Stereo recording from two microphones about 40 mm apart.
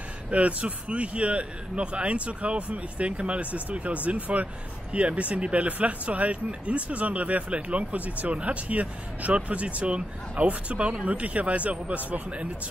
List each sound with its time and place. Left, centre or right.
0.3 s speech: right